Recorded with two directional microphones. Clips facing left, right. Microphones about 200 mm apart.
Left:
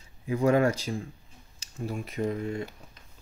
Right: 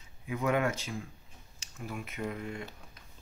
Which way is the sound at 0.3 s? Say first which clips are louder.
Left 7 dB; 30° left (ahead or behind).